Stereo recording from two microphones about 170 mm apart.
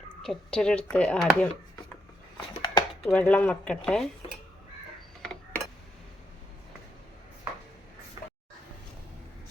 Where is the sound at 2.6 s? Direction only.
25° left (ahead or behind).